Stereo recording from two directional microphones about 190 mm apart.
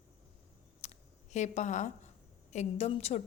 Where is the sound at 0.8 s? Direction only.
35° left (ahead or behind).